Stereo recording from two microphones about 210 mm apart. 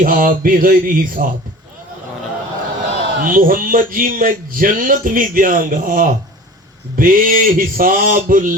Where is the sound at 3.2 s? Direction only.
40° right (ahead or behind).